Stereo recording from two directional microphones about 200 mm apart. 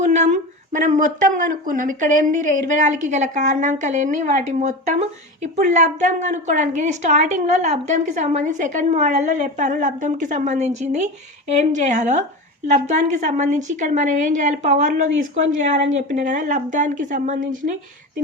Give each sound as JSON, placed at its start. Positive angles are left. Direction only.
{"t": 0.1, "sound": "speech", "side_deg": -35}